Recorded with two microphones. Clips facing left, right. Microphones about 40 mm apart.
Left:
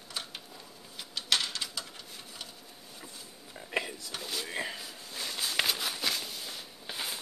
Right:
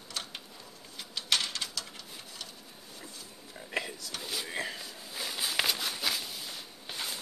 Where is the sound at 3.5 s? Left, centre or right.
Centre.